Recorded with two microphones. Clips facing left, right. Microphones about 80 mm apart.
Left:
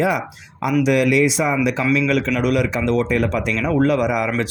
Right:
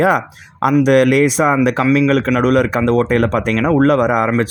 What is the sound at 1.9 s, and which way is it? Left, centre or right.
Speech, right.